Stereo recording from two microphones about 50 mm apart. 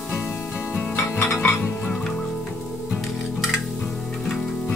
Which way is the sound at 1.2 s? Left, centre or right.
Left.